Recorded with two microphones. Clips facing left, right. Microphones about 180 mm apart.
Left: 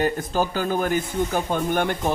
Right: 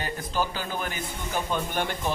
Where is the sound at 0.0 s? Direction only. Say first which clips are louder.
Left 7 dB; 50° left (ahead or behind).